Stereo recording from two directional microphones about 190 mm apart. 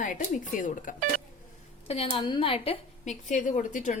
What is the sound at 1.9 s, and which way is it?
A woman's voice, 30° left (ahead or behind).